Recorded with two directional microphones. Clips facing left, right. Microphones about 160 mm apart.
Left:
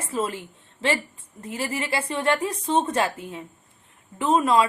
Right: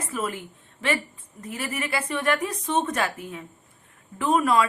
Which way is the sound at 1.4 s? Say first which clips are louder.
Left 2 dB; 25° left (ahead or behind).